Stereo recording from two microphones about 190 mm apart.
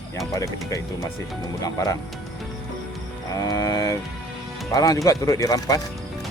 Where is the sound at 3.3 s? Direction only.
20° left (ahead or behind).